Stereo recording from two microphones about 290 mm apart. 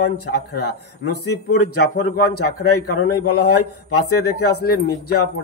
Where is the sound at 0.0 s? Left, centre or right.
Left.